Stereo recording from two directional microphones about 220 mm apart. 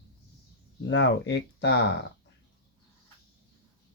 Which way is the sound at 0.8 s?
55° left (ahead or behind).